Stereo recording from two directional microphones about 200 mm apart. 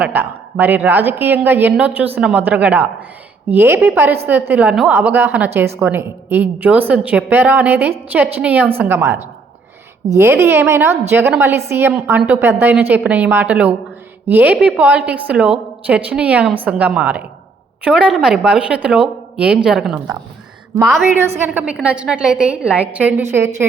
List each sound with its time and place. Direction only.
0.0 s a woman's voice: 10° right (ahead or behind)